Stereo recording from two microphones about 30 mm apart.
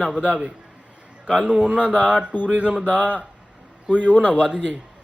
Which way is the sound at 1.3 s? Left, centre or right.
Right.